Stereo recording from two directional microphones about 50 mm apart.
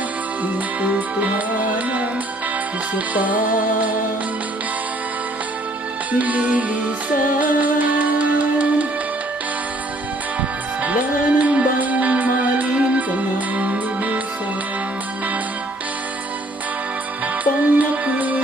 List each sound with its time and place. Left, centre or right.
0.4 s music: right
2.9 s music: right
6.1 s music: right
10.8 s music: right
17.4 s music: right